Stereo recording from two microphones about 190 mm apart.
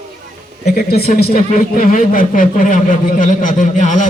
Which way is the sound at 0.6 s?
50° left (ahead or behind).